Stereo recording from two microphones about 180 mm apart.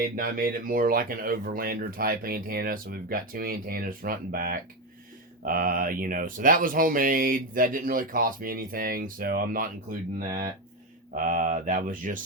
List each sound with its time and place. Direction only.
0.0 s speech: 50° right (ahead or behind)